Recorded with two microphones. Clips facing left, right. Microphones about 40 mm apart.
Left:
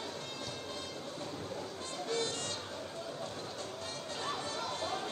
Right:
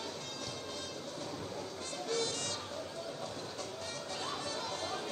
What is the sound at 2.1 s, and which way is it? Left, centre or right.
Music, left.